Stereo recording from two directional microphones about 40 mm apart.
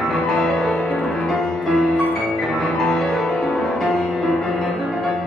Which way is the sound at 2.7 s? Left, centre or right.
Centre.